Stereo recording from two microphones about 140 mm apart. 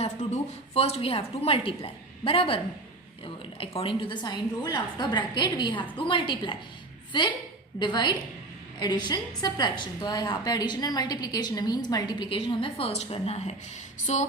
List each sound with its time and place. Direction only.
0.0 s a woman's voice: 50° left (ahead or behind)
3.6 s a woman's voice: 40° left (ahead or behind)
7.8 s a woman's voice: 30° left (ahead or behind); by 14.2 s 55° left (ahead or behind)